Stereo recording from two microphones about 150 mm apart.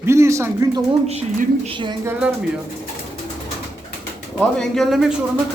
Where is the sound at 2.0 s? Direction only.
10° right (ahead or behind).